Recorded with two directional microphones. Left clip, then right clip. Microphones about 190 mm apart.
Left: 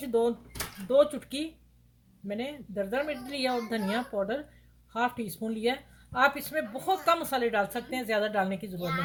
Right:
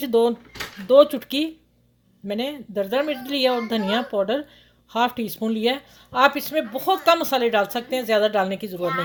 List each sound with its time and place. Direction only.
0.0 s speech: 35° right (ahead or behind)